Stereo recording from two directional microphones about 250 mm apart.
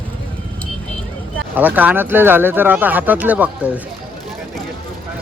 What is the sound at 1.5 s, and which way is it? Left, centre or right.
Speech, centre.